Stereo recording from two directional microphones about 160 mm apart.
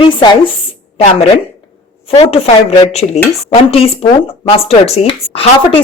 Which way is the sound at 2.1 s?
40° left (ahead or behind).